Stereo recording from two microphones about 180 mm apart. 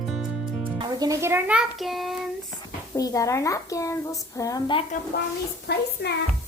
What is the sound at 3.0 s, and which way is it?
Speech, 20° left (ahead or behind).